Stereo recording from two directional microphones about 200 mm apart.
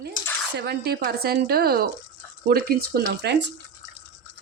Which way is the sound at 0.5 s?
55° right (ahead or behind).